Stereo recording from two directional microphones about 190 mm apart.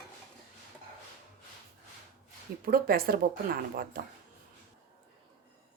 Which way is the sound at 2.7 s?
50° right (ahead or behind).